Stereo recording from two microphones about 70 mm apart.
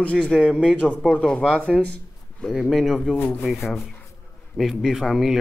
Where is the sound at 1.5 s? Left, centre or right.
Centre.